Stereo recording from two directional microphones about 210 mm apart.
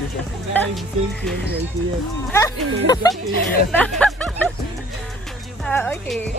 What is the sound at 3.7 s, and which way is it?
Music, 5° left (ahead or behind).